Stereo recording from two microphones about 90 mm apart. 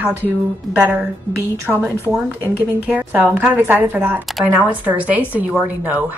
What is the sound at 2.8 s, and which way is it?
A woman's voice, 20° right (ahead or behind).